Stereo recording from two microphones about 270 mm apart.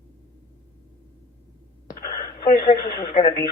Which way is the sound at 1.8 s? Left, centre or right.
Left.